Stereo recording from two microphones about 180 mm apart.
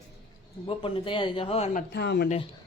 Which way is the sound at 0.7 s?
30° left (ahead or behind).